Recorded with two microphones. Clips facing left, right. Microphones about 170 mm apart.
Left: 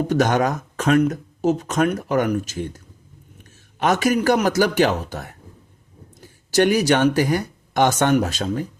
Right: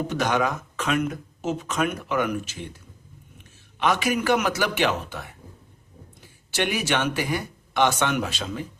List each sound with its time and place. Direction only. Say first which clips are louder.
0.1 s speech: left 6 dB; 45° left (ahead or behind)